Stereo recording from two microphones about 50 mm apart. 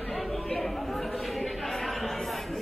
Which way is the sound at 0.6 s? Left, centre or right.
Centre.